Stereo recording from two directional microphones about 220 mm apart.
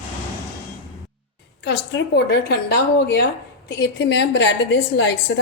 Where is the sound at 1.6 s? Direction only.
50° left (ahead or behind).